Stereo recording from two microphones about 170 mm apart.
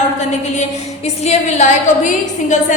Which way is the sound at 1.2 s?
45° left (ahead or behind).